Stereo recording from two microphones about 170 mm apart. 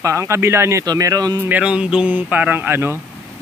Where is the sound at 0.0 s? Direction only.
15° right (ahead or behind).